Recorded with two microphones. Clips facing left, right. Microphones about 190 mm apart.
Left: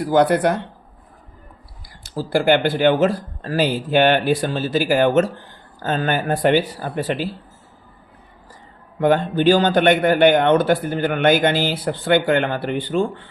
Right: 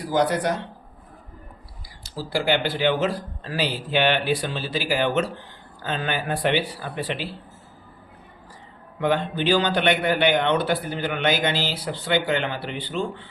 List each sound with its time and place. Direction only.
0.0 s speech: 60° left (ahead or behind)
2.0 s a man's voice: 50° left (ahead or behind)
9.0 s a man's voice: 45° left (ahead or behind)